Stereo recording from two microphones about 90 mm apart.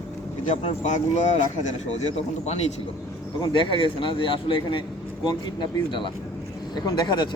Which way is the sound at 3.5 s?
70° left (ahead or behind).